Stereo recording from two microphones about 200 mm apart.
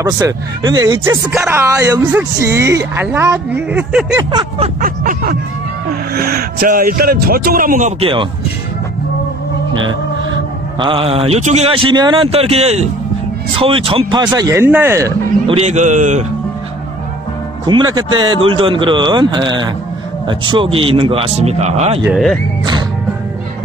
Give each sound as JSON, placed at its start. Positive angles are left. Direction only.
{"t": 0.0, "sound": "speech", "side_deg": -20}
{"t": 4.1, "sound": "speech", "side_deg": -20}
{"t": 4.8, "sound": "speech", "side_deg": -45}
{"t": 8.0, "sound": "speech", "side_deg": -25}
{"t": 10.8, "sound": "speech", "side_deg": -25}
{"t": 15.4, "sound": "a man's voice", "side_deg": -30}
{"t": 17.6, "sound": "speech", "side_deg": -20}
{"t": 22.1, "sound": "speech", "side_deg": 0}